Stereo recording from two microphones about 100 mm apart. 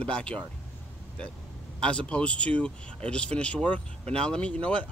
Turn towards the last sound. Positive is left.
turn(degrees=10)  # may be behind; listen again after turning